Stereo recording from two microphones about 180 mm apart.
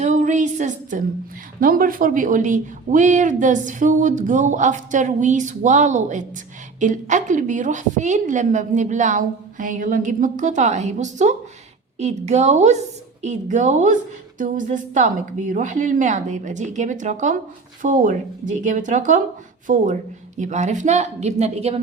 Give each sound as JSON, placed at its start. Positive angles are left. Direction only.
{"t": 0.0, "sound": "a woman's voice", "side_deg": -45}